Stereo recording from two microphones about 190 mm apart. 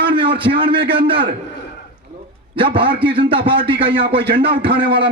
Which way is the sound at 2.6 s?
25° right (ahead or behind).